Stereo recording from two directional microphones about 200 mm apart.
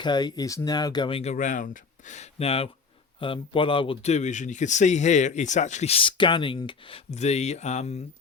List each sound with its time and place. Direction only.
0.0 s speech: 20° left (ahead or behind)